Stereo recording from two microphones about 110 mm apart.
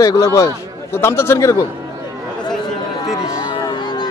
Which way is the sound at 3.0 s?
35° left (ahead or behind).